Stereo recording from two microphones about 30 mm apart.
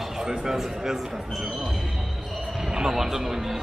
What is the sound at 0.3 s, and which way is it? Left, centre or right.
Speech, centre.